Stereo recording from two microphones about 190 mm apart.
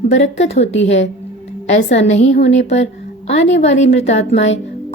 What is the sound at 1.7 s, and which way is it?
A woman's voice, 35° left (ahead or behind).